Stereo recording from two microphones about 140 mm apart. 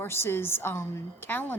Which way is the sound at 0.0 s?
15° left (ahead or behind).